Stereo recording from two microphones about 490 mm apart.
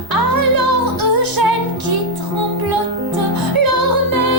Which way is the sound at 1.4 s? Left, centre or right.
Right.